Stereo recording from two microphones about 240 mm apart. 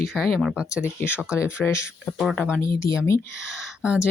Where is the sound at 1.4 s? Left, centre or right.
Centre.